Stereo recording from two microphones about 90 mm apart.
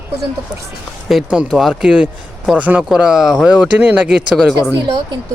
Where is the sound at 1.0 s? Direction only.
10° right (ahead or behind).